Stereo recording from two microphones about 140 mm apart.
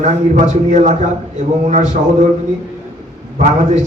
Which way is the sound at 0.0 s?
60° right (ahead or behind).